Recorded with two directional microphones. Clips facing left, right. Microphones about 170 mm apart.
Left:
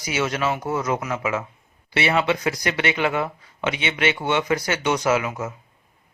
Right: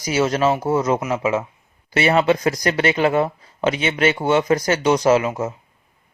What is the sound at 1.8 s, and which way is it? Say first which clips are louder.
Speech: right 5 dB; 40° right (ahead or behind).